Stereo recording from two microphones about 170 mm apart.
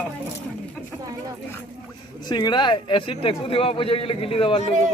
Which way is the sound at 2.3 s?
25° left (ahead or behind).